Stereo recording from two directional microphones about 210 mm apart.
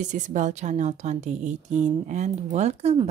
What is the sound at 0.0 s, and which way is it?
A woman's voice, 35° right (ahead or behind).